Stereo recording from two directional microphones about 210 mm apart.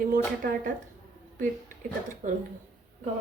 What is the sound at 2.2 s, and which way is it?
Speech, 40° right (ahead or behind).